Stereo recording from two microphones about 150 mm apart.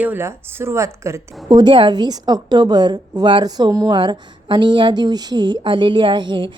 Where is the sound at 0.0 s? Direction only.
15° right (ahead or behind).